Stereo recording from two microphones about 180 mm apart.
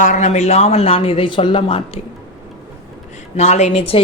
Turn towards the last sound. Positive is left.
turn(degrees=35)  # may be behind; listen again after turning